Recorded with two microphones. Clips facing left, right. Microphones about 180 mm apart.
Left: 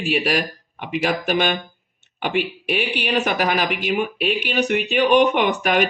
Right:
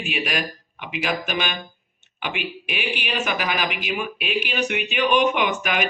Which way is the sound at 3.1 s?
60° left (ahead or behind).